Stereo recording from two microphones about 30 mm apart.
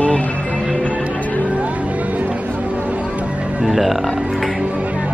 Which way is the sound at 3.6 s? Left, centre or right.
Centre.